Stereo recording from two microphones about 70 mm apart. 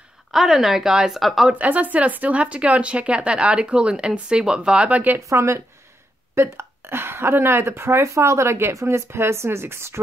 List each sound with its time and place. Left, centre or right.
0.3 s a woman's voice: centre
1.5 s speech: right
5.3 s speech: right